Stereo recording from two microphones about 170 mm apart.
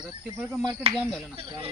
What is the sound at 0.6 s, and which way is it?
Speech, 25° right (ahead or behind).